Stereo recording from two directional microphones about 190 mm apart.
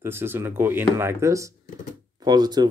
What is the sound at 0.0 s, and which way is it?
Speech, 10° right (ahead or behind).